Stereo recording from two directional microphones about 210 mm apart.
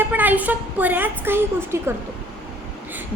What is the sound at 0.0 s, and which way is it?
A woman's voice, 10° right (ahead or behind).